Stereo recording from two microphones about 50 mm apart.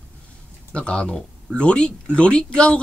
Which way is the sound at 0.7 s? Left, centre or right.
Left.